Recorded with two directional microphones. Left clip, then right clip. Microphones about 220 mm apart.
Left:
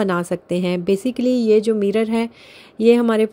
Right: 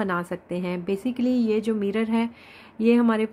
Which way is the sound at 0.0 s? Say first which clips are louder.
Left 6 dB; 30° left (ahead or behind).